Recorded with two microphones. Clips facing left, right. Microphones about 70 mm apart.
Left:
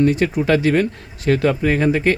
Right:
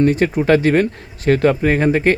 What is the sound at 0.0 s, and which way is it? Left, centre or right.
Speech, right.